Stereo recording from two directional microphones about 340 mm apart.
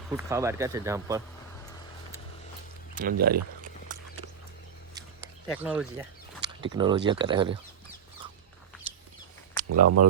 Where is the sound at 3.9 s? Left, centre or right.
Right.